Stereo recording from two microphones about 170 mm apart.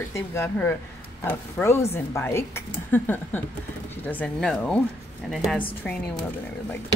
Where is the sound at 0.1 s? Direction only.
15° left (ahead or behind).